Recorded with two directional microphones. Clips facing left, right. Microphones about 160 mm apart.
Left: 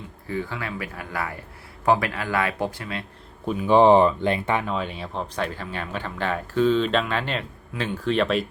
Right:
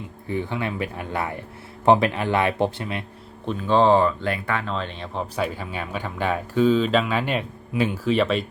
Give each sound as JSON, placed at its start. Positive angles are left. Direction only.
{"t": 0.3, "sound": "speech", "side_deg": -20}
{"t": 3.4, "sound": "speech", "side_deg": 10}
{"t": 4.6, "sound": "speech", "side_deg": 10}
{"t": 5.5, "sound": "speech", "side_deg": -10}